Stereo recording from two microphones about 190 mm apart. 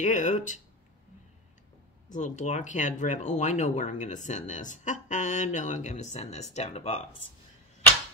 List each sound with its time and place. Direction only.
0.0 s speech: 40° left (ahead or behind)
2.1 s speech: 40° left (ahead or behind)